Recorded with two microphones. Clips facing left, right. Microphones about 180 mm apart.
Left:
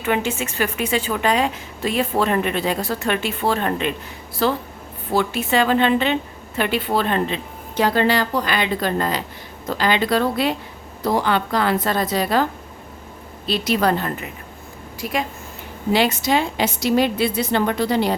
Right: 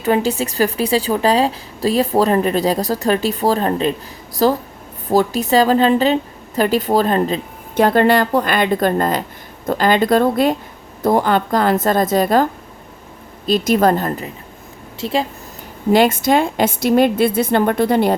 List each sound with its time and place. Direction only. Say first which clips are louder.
0.0 s a woman's voice: right 5 dB; 35° right (ahead or behind)
13.5 s a woman's voice: right 5 dB; 45° right (ahead or behind)
14.9 s a woman's voice: right 5 dB; 30° right (ahead or behind)
15.9 s a woman's voice: right 5 dB; 50° right (ahead or behind)